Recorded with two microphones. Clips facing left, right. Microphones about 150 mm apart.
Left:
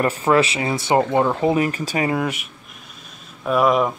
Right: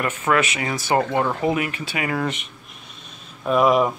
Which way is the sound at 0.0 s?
30° left (ahead or behind).